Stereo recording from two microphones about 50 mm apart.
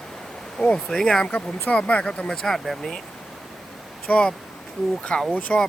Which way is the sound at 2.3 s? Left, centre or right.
Centre.